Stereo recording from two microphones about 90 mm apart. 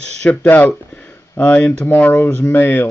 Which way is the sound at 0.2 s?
10° left (ahead or behind).